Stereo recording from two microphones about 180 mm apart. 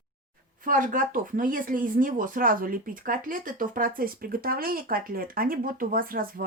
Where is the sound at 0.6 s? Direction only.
50° right (ahead or behind).